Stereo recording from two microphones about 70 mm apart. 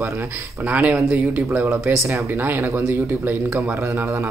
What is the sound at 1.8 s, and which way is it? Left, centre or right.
Speech, right.